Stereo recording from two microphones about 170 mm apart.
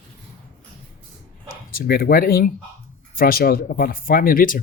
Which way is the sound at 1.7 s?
60° left (ahead or behind).